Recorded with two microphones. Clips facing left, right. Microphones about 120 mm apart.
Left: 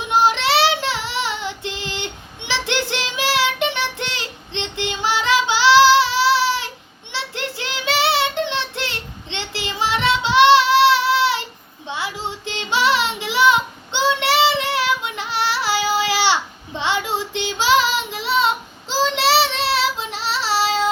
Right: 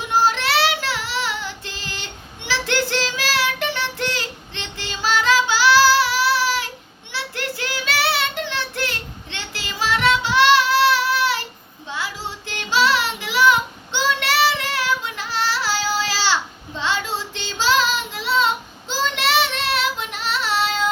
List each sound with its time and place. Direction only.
0.0 s child singing: 20° left (ahead or behind)